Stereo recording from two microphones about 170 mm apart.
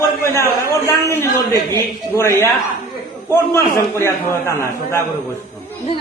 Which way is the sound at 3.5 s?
15° left (ahead or behind).